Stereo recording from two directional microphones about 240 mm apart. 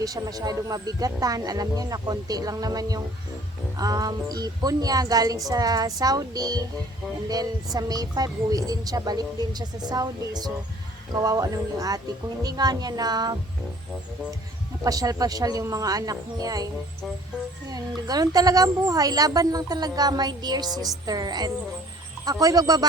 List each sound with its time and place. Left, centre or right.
0.0 s speech: centre
14.8 s speech: centre
17.7 s speech: centre